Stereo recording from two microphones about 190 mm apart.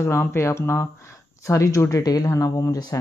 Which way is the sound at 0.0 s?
15° left (ahead or behind).